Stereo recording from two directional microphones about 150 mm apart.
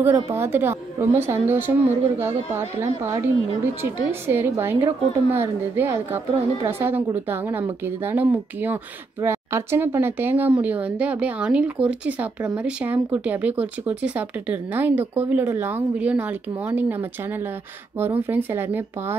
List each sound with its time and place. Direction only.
0.0 s speech: 15° right (ahead or behind)